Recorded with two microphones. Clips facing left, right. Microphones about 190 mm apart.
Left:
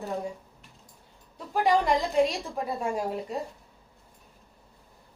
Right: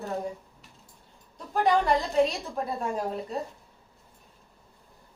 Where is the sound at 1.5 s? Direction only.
10° left (ahead or behind).